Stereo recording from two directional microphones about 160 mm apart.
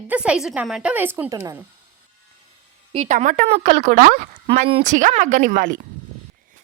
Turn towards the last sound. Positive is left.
turn(degrees=-55)  # may be behind; listen again after turning